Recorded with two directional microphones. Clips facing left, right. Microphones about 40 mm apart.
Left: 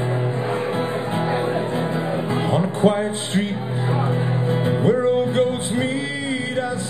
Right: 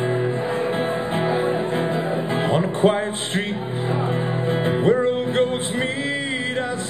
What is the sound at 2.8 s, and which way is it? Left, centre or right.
Speech, right.